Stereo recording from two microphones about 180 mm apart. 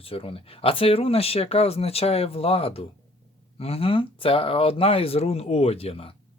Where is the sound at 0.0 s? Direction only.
30° left (ahead or behind).